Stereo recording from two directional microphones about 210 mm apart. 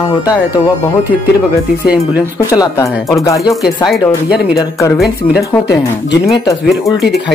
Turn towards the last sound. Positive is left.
turn(degrees=10)  # may be behind; listen again after turning